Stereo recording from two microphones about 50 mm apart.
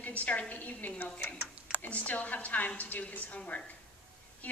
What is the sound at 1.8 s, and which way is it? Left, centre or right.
A woman's voice, left.